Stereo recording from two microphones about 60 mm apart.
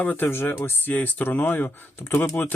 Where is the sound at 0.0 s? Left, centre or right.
Left.